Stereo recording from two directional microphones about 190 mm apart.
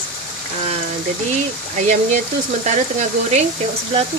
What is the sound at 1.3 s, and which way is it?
Speech, 40° right (ahead or behind).